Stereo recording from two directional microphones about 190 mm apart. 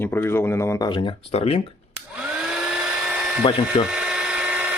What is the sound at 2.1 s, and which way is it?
Hair dryer, 5° right (ahead or behind).